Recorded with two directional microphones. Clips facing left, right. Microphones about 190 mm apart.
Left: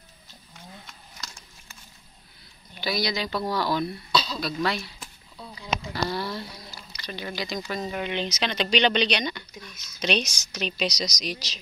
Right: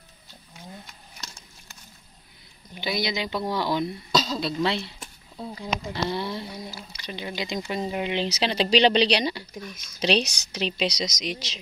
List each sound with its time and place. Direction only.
2.8 s speech: 20° right (ahead or behind)
4.1 s throat clearing: 45° right (ahead or behind)
4.4 s speech: 25° right (ahead or behind)
5.4 s speech: 40° right (ahead or behind)
5.7 s speech: 20° right (ahead or behind)